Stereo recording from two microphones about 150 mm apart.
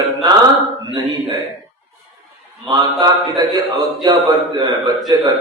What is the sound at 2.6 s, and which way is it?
A man's voice, 25° right (ahead or behind).